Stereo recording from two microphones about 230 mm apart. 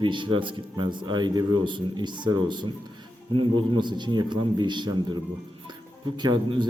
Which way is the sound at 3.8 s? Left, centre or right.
Centre.